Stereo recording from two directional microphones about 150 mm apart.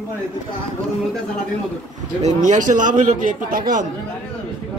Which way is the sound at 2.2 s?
55° right (ahead or behind).